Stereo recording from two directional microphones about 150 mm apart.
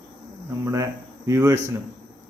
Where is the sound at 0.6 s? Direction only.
20° right (ahead or behind).